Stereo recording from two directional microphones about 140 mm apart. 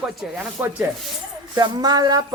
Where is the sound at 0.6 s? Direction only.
10° right (ahead or behind).